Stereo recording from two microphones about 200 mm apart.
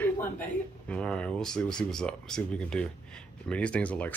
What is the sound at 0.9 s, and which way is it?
Speech, 5° left (ahead or behind).